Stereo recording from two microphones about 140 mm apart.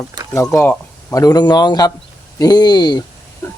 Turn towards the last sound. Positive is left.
turn(degrees=30)  # may be behind; listen again after turning